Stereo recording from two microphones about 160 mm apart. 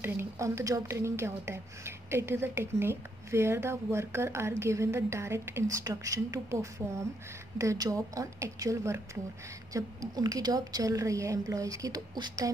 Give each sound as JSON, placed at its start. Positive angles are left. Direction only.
{"t": 0.0, "sound": "a woman's voice", "side_deg": -15}